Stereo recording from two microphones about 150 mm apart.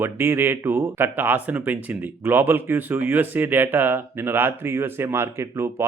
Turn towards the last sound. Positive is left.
turn(degrees=-20)  # may be behind; listen again after turning